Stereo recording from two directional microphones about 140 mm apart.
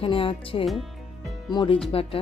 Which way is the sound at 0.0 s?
40° left (ahead or behind).